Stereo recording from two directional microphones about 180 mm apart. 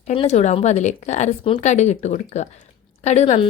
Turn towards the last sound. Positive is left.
turn(degrees=40)  # may be behind; listen again after turning